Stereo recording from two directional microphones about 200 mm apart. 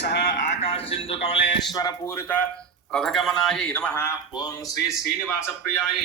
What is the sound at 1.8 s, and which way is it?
Speech, 15° left (ahead or behind).